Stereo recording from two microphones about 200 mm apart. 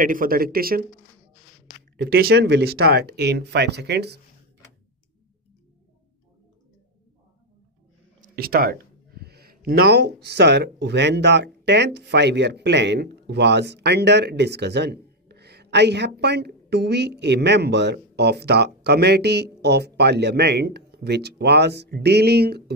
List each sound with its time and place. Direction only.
0.0 s speech: 45° right (ahead or behind)
2.0 s speech: 50° right (ahead or behind)
8.2 s speech: 50° right (ahead or behind)
9.2 s a sound: 50° right (ahead or behind)
10.2 s speech: 60° right (ahead or behind)